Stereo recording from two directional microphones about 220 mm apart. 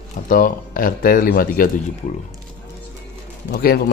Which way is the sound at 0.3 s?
40° left (ahead or behind).